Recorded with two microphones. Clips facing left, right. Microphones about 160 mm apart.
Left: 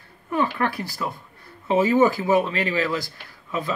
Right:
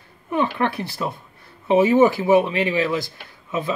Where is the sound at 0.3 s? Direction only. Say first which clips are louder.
Right 2 dB; 20° right (ahead or behind).